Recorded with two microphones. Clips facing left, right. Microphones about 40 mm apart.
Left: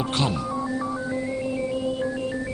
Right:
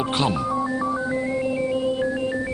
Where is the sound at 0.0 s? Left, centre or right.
Centre.